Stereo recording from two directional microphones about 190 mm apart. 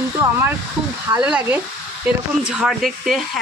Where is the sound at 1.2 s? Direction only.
5° right (ahead or behind).